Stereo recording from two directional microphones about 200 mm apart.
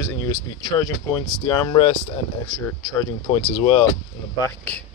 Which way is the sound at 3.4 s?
30° left (ahead or behind).